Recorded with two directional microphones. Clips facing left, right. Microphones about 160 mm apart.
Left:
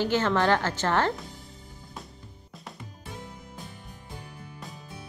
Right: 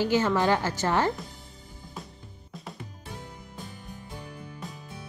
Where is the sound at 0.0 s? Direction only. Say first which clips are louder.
Right 1 dB; 10° right (ahead or behind).